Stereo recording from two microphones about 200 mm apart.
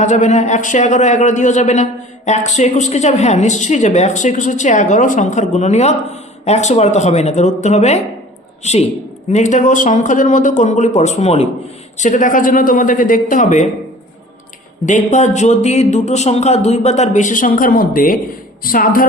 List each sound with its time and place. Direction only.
0.0 s a man's voice: 35° left (ahead or behind)
14.8 s a man's voice: 35° left (ahead or behind)